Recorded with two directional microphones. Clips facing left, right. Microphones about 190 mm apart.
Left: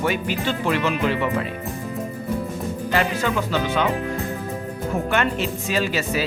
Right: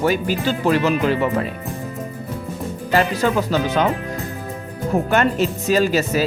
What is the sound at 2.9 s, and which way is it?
Speech, 40° right (ahead or behind).